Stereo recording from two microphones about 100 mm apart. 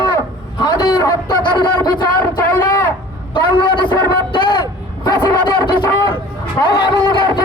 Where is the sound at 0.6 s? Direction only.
45° left (ahead or behind).